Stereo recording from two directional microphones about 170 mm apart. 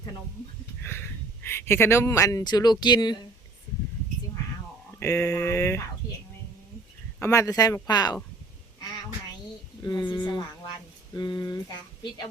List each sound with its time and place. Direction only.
0.8 s a sound: 15° left (ahead or behind)
1.5 s speech: 15° left (ahead or behind)
4.9 s speech: 15° left (ahead or behind)
7.2 s speech: 20° left (ahead or behind)
9.8 s speech: 25° left (ahead or behind)